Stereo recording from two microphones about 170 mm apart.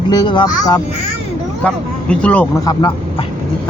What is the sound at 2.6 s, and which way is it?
Speech, 25° left (ahead or behind).